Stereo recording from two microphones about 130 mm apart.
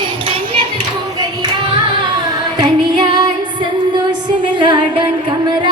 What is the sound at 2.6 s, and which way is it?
Female singing, 35° right (ahead or behind).